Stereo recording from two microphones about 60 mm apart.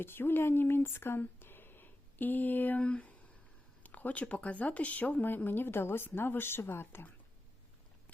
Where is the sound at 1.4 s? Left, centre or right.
Left.